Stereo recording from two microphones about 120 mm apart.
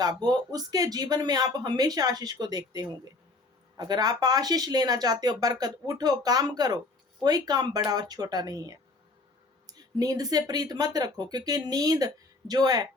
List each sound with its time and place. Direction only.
0.0 s speech: 35° right (ahead or behind)